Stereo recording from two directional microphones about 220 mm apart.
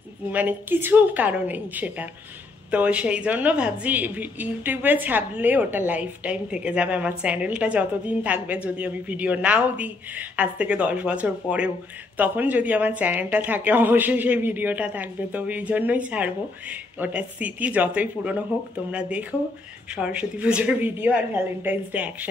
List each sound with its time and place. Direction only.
0.3 s a woman's voice: 10° right (ahead or behind)